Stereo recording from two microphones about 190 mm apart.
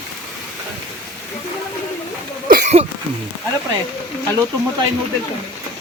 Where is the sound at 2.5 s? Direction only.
45° right (ahead or behind).